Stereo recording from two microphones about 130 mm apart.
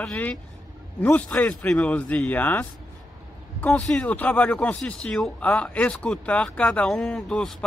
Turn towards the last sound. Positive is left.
turn(degrees=5)  # may be behind; listen again after turning